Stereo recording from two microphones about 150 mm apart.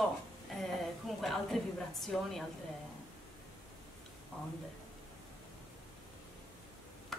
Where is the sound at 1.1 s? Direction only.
Centre (ahead or behind).